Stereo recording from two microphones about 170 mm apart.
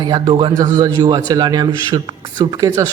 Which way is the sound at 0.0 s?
25° right (ahead or behind).